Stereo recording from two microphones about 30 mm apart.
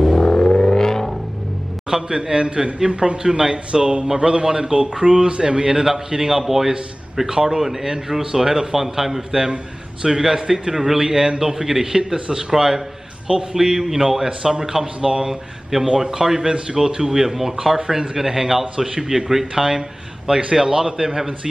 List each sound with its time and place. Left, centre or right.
0.2 s a sound: left
0.7 s vehicle: centre
1.9 s a man's voice: right
12.5 s a man's voice: centre
15.2 s a man's voice: centre